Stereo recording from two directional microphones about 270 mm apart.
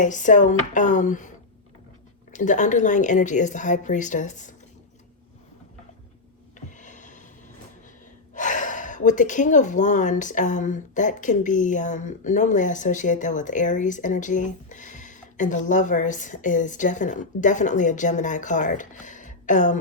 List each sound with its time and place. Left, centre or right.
0.0 s speech: left
2.3 s speech: left
6.7 s a sound: left
8.4 s speech: left